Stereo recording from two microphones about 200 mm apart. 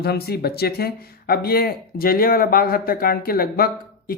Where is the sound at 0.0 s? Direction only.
50° left (ahead or behind).